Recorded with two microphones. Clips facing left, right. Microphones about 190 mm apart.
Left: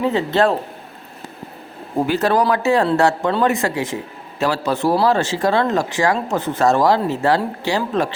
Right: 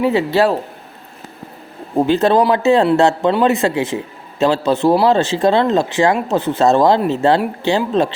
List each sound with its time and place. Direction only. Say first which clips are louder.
0.0 s speech: right 3 dB; 10° right (ahead or behind)
2.0 s speech: right 4 dB; 25° right (ahead or behind)